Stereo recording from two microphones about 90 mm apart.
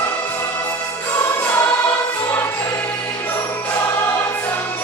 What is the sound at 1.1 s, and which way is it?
Choir, 25° left (ahead or behind).